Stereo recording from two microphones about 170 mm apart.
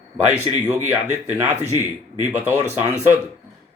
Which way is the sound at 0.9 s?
10° right (ahead or behind).